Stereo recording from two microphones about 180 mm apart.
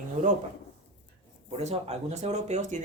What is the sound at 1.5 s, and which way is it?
Speech, 35° right (ahead or behind).